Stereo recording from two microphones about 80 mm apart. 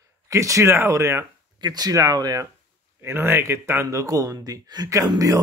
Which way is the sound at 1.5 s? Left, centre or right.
Right.